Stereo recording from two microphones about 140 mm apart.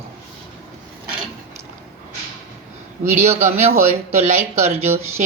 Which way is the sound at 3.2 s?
50° right (ahead or behind).